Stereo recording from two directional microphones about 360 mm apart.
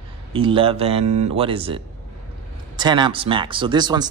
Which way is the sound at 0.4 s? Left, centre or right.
Centre.